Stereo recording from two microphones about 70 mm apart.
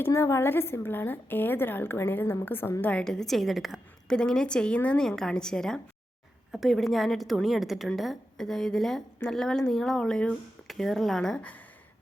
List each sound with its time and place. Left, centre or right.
0.0 s a woman's voice: left
3.0 s a woman's voice: centre
4.1 s a woman's voice: centre
6.5 s a woman's voice: centre